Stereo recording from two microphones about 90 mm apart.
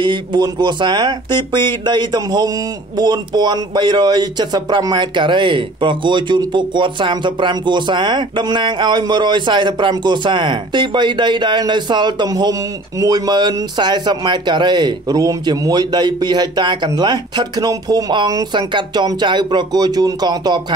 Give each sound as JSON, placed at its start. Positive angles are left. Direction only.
{"t": 0.0, "sound": "a man's voice", "side_deg": -60}